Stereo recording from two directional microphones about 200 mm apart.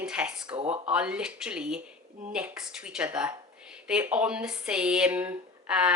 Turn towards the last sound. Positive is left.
turn(degrees=-5)  # may be behind; listen again after turning